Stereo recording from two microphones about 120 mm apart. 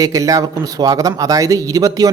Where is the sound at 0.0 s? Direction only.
30° right (ahead or behind).